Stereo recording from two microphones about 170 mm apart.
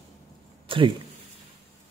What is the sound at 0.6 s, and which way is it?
Speech, 30° right (ahead or behind).